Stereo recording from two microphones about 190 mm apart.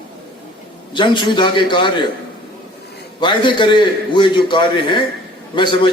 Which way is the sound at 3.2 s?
25° left (ahead or behind).